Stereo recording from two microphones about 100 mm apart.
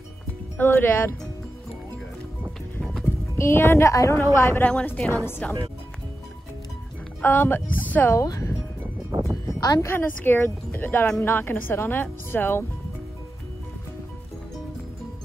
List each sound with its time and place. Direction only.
0.6 s speech: 20° left (ahead or behind)
2.8 s music: 5° left (ahead or behind)
3.3 s speech: 25° left (ahead or behind)
4.6 s a woman's voice: 10° left (ahead or behind)
7.2 s speech: 20° left (ahead or behind)
8.2 s speech: 35° left (ahead or behind)
9.6 s speech: 30° left (ahead or behind)